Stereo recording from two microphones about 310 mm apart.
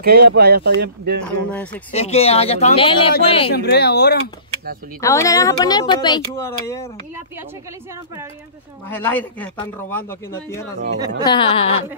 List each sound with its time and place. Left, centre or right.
0.0 s speech: right
1.2 s speech: centre
1.9 s speech: centre
3.5 s speech: left
5.0 s speech: centre
8.8 s speech: centre